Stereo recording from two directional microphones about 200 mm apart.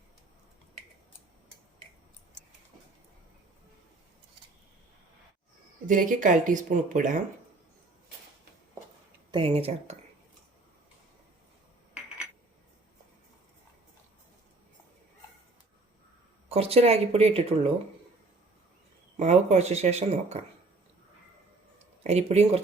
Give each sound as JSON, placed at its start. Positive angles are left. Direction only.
{"t": 5.8, "sound": "speech", "side_deg": -40}
{"t": 9.3, "sound": "speech", "side_deg": -25}
{"t": 11.9, "sound": "a sound", "side_deg": -5}
{"t": 16.5, "sound": "speech", "side_deg": -30}
{"t": 19.2, "sound": "speech", "side_deg": -35}
{"t": 22.0, "sound": "speech", "side_deg": -30}